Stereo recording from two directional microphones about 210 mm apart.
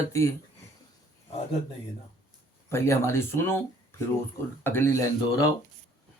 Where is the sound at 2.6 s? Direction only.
10° left (ahead or behind).